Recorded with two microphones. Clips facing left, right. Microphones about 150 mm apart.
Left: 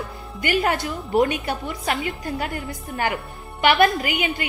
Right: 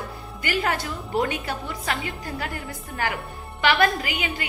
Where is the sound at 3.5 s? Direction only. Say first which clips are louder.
Left 3 dB; 20° left (ahead or behind).